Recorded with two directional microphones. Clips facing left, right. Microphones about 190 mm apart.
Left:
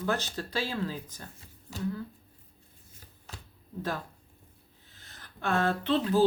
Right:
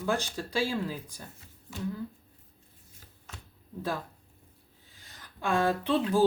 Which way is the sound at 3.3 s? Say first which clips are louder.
Left 1 dB; 35° left (ahead or behind).